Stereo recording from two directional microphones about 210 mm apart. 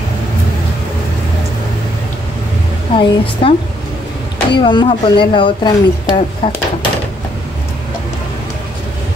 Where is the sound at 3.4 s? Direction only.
25° left (ahead or behind).